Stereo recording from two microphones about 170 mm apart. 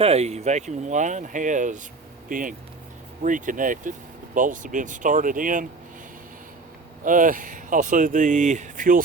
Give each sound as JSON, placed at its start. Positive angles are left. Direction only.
{"t": 0.0, "sound": "speech", "side_deg": -35}
{"t": 7.0, "sound": "speech", "side_deg": -50}